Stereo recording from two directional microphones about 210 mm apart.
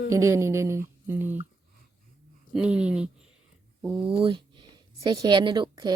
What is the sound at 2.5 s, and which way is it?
Speech, 5° right (ahead or behind).